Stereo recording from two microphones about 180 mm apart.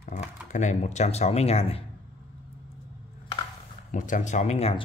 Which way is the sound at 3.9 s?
45° left (ahead or behind).